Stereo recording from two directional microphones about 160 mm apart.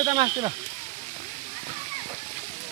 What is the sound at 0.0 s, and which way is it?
Speech, 30° right (ahead or behind).